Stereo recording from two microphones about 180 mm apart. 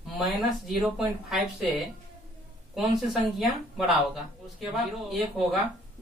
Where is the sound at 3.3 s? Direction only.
Centre (ahead or behind).